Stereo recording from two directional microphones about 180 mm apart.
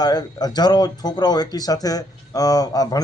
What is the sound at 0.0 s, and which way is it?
Speech, 20° left (ahead or behind).